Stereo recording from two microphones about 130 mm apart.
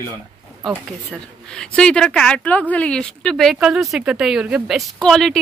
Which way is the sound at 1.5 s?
5° left (ahead or behind).